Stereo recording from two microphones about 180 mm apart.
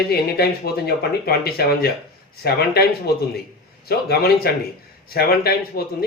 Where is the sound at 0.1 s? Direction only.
60° left (ahead or behind).